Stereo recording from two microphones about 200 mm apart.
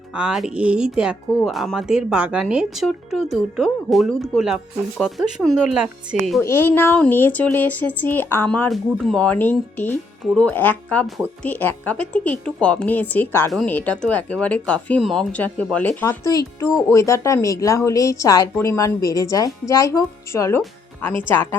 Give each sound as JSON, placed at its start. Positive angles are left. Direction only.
{"t": 0.1, "sound": "speech", "side_deg": -5}
{"t": 6.4, "sound": "speech", "side_deg": 10}